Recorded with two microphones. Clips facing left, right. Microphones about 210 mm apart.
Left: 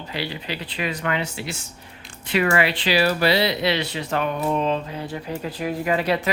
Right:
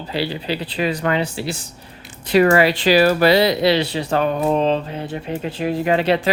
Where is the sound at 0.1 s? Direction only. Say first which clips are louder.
Right 7 dB; 30° right (ahead or behind).